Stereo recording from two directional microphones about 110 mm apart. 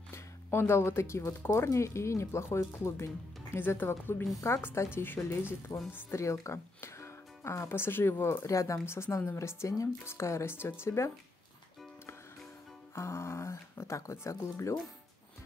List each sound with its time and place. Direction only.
0.1 s speech: 20° left (ahead or behind)
12.9 s speech: 25° left (ahead or behind)